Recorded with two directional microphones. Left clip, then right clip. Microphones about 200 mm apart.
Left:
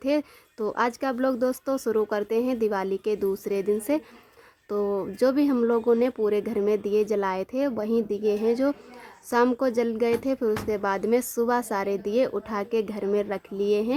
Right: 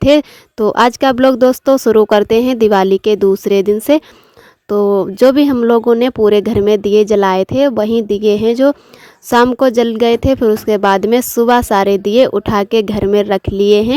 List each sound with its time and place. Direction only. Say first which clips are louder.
0.0 s speech: right 16 dB; 40° right (ahead or behind)